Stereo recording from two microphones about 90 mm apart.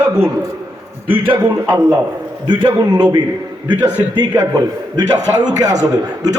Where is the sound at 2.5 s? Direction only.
55° right (ahead or behind).